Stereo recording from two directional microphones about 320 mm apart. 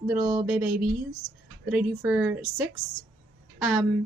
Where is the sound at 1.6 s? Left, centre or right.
Centre.